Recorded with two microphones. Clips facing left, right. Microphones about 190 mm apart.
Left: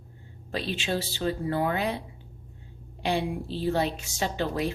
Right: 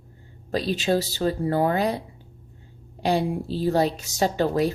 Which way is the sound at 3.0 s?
40° right (ahead or behind).